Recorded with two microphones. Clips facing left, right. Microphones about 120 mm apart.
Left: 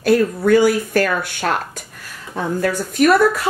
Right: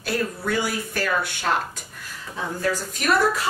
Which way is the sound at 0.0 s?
55° left (ahead or behind).